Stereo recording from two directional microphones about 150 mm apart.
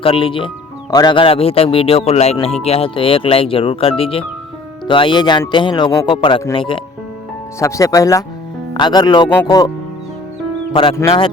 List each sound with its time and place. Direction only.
0.0 s speech: 35° left (ahead or behind)
7.6 s speech: 20° left (ahead or behind)